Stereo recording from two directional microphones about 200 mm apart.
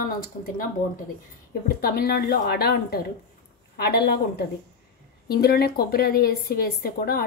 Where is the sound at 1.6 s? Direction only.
50° left (ahead or behind).